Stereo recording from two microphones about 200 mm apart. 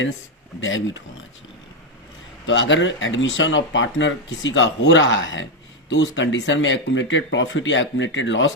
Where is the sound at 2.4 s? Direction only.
65° left (ahead or behind).